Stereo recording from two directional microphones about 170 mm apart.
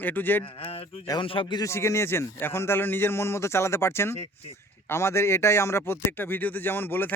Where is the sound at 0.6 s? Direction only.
35° left (ahead or behind).